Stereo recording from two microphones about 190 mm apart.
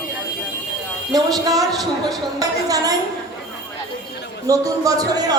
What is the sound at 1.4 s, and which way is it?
Speech, 20° right (ahead or behind).